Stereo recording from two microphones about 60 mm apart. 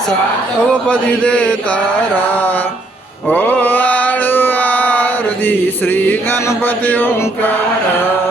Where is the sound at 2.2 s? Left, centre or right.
Left.